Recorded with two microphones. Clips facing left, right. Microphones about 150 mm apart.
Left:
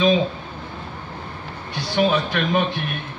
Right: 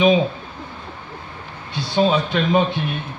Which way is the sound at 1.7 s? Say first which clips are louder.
Right 2 dB; 25° right (ahead or behind).